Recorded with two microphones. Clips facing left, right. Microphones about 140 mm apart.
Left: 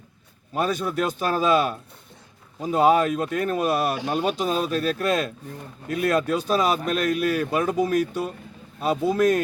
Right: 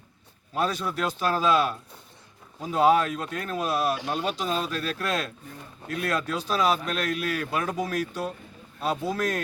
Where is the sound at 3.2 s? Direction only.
55° left (ahead or behind).